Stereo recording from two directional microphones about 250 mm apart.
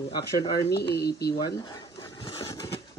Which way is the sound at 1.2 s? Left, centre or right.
Centre.